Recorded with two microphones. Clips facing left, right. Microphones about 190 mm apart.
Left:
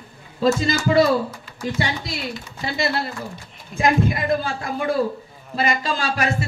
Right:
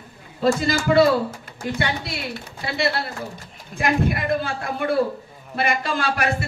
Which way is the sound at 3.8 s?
60° right (ahead or behind).